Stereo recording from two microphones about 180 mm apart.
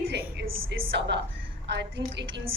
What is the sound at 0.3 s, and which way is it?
A woman's voice, 75° right (ahead or behind).